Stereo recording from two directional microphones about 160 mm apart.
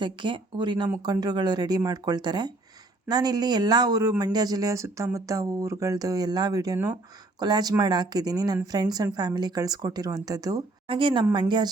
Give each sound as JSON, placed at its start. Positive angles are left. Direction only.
{"t": 0.0, "sound": "a woman's voice", "side_deg": -30}